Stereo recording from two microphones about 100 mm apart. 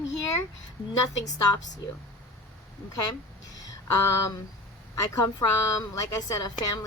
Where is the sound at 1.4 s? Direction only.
40° left (ahead or behind).